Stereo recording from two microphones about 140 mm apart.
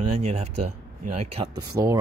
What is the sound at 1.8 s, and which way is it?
Speech, 20° right (ahead or behind).